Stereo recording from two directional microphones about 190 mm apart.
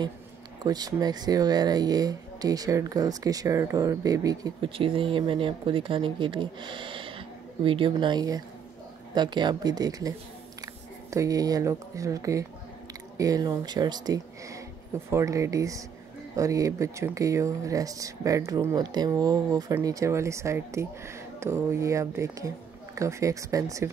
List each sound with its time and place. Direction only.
0.7 s speech: 20° right (ahead or behind)